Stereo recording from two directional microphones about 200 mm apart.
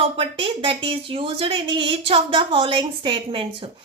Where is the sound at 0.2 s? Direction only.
25° right (ahead or behind).